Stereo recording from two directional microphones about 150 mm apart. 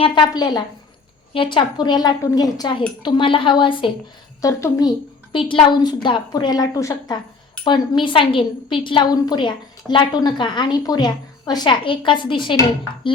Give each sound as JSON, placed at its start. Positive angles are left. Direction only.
{"t": 0.0, "sound": "a woman's voice", "side_deg": 30}
{"t": 4.4, "sound": "a woman's voice", "side_deg": 25}
{"t": 5.3, "sound": "a woman's voice", "side_deg": 35}